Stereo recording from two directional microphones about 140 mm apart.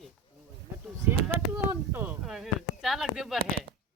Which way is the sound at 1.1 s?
15° right (ahead or behind).